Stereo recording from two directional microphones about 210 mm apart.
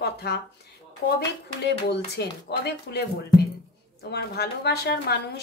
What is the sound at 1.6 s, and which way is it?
Speech, 50° left (ahead or behind).